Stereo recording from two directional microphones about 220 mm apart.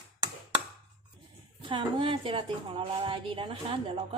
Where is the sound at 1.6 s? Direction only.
20° right (ahead or behind).